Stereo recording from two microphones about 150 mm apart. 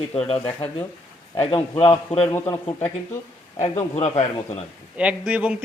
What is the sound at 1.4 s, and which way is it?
Speech, 35° left (ahead or behind).